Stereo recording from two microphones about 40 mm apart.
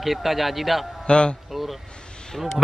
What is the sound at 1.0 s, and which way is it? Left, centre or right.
Speech, left.